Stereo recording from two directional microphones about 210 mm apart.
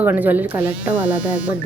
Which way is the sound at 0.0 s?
10° right (ahead or behind).